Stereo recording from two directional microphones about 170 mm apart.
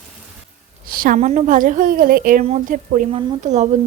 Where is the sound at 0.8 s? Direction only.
55° right (ahead or behind).